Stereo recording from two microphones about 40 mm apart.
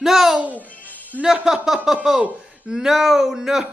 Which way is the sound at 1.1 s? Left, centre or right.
Left.